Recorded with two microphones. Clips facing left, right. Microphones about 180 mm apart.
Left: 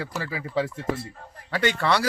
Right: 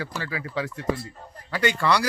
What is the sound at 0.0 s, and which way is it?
A man's voice, 5° left (ahead or behind).